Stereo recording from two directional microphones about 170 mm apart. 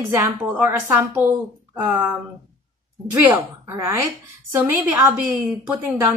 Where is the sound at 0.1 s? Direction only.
15° right (ahead or behind).